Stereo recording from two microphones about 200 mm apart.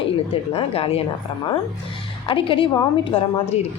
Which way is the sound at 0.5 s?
30° left (ahead or behind).